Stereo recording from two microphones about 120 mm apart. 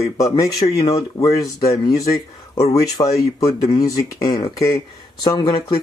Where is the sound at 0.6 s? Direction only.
60° left (ahead or behind).